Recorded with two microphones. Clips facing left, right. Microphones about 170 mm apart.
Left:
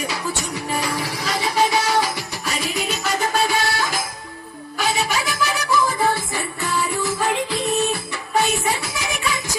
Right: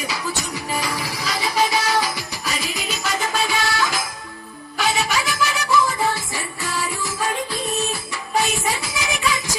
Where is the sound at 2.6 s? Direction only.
60° left (ahead or behind).